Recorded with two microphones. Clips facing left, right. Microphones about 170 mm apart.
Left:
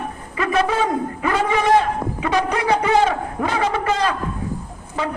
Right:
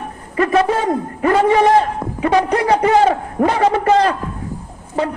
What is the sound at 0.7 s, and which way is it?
A man's voice, 40° right (ahead or behind).